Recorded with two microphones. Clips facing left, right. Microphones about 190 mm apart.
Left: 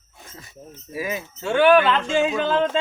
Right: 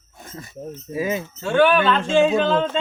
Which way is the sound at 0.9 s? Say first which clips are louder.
Right 4 dB; 25° right (ahead or behind).